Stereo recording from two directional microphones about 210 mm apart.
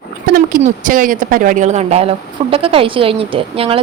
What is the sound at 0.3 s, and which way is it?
Speech, 40° right (ahead or behind).